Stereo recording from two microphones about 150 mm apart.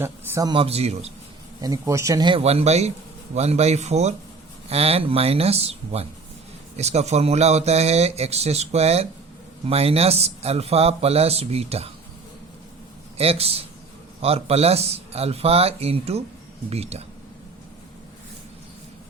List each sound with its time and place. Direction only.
0.0 s a man's voice: 20° right (ahead or behind)
0.5 s speech: 40° right (ahead or behind)
1.6 s speech: 20° right (ahead or behind)
2.4 s speech: 45° right (ahead or behind)
13.1 s speech: 40° right (ahead or behind)